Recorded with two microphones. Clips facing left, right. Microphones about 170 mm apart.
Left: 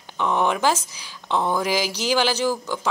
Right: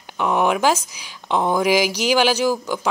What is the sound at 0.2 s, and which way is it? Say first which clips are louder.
Speech: right 3 dB; 10° right (ahead or behind).